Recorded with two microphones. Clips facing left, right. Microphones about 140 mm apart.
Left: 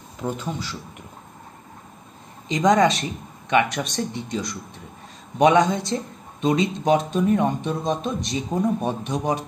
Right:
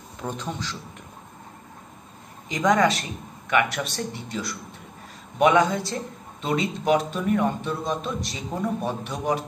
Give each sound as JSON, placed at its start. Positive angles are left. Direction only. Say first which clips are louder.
{"t": 0.2, "sound": "a man's voice", "louder": "left 3 dB", "side_deg": 5}
{"t": 2.4, "sound": "speech", "louder": "left 3 dB", "side_deg": 20}